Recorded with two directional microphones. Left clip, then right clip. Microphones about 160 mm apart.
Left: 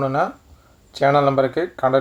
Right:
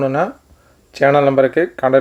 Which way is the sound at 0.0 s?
25° right (ahead or behind).